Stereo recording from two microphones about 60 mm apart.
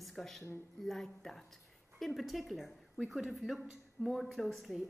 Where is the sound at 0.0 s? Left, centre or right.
Centre.